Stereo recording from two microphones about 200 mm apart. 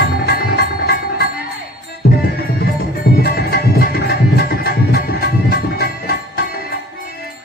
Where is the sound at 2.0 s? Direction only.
55° left (ahead or behind).